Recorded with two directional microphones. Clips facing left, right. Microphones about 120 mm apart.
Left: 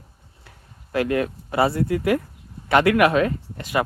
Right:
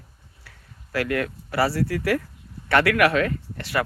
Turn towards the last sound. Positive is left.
turn(degrees=20)  # may be behind; listen again after turning